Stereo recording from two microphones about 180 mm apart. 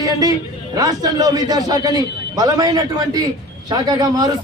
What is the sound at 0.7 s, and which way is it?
A man's voice, 20° right (ahead or behind).